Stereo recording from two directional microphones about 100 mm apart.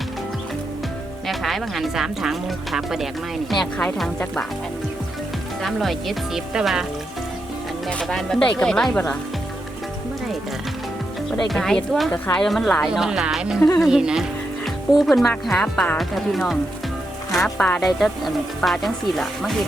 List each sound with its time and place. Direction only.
1.3 s speech: centre (ahead or behind)
5.6 s speech: centre (ahead or behind)
7.9 s speech: 10° left (ahead or behind)
11.3 s speech: 5° left (ahead or behind)
12.1 s speech: 15° left (ahead or behind)
12.4 s speech: 5° left (ahead or behind)
12.9 s speech: 5° right (ahead or behind)